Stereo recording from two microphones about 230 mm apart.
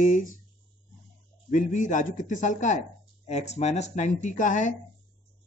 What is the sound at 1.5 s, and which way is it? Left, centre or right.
Speech, left.